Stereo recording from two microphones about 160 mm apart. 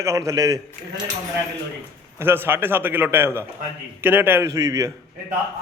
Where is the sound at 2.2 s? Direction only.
15° right (ahead or behind).